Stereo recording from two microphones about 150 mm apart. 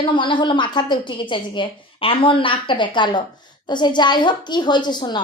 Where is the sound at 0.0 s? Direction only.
35° left (ahead or behind).